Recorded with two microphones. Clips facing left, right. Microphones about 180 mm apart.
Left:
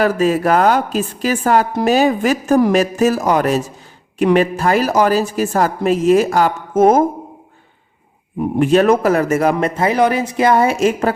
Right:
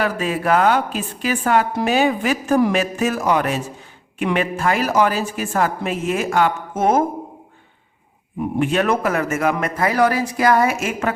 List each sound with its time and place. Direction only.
0.0 s speech: 40° left (ahead or behind)
8.4 s a man's voice: 40° left (ahead or behind)